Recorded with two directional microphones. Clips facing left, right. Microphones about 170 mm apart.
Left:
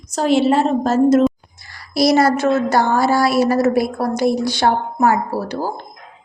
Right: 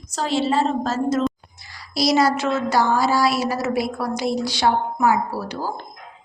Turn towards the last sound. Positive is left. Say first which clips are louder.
# left 3 dB
turn(degrees=50)  # may be behind; listen again after turning